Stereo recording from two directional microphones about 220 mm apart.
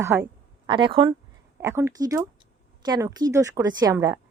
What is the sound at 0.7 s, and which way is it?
Speech, 20° right (ahead or behind).